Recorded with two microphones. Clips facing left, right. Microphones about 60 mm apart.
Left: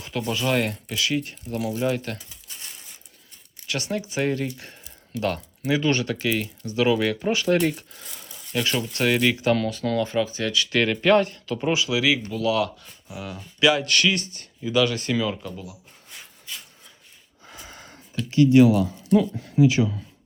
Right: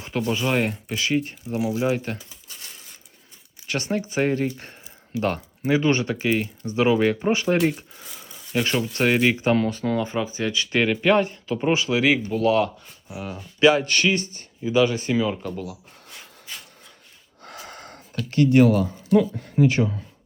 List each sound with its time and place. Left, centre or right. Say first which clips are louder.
0.0 s speech: right 2 dB; right; by 0.9 s centre
0.9 s speech: right 2 dB; right
3.7 s speech: right 2 dB; right
10.8 s speech: left 1 dB; centre
15.4 s a sound: right 5 dB; right
17.4 s a sound: right 4 dB; right